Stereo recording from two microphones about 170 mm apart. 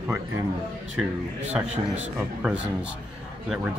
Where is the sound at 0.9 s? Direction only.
10° right (ahead or behind).